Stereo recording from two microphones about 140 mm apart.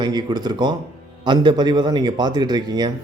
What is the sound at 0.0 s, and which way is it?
A man's voice, 30° right (ahead or behind).